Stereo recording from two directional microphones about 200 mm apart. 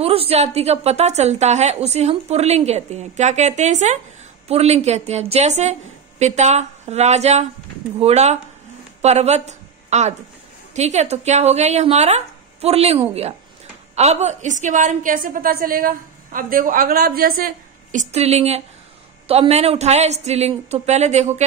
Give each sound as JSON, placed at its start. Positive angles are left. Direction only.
{"t": 0.0, "sound": "a woman's voice", "side_deg": -30}
{"t": 18.1, "sound": "a woman's voice", "side_deg": -30}